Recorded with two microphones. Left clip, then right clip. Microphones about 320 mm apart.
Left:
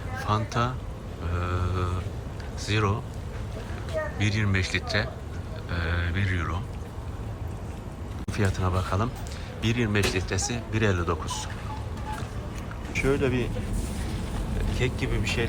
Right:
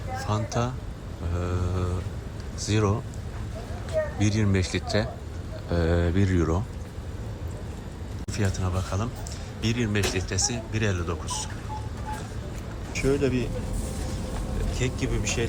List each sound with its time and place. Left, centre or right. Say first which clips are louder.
0.3 s speech: left 3 dB; centre
8.3 s speech: left 3 dB; centre
12.9 s speech: even; centre
14.8 s speech: left 1 dB; centre